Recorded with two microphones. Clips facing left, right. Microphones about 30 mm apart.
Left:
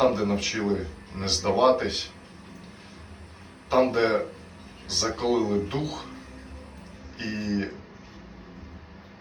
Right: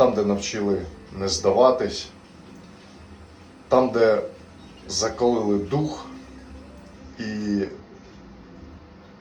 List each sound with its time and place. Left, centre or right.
0.0 s speech: left
3.7 s speech: left
7.2 s speech: left